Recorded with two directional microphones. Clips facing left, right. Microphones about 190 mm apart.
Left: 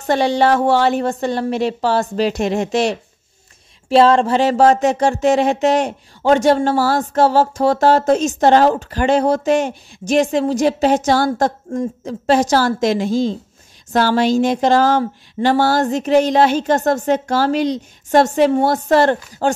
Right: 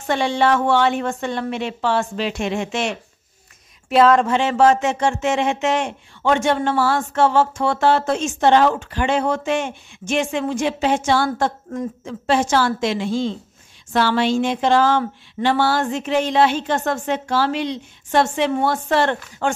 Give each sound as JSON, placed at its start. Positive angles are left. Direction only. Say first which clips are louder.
{"t": 0.0, "sound": "speech", "louder": "left 4 dB", "side_deg": 40}